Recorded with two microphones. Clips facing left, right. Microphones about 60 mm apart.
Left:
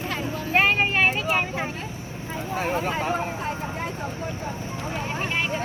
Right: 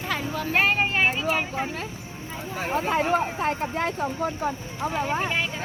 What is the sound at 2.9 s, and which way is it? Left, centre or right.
Vehicle, right.